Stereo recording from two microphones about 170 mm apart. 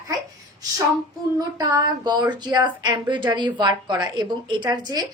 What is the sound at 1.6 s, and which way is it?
A woman's voice, 25° right (ahead or behind).